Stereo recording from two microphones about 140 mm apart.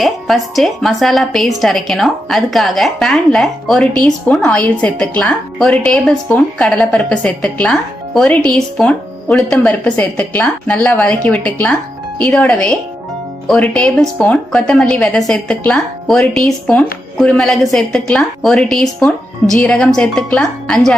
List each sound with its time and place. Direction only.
0.0 s a woman's voice: centre (ahead or behind)